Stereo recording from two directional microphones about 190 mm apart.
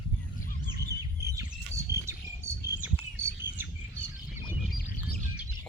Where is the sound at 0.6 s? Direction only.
60° right (ahead or behind).